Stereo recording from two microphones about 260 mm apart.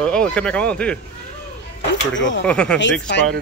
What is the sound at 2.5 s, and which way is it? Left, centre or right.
Speech, centre.